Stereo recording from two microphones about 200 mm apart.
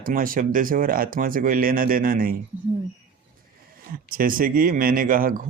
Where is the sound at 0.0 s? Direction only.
45° right (ahead or behind).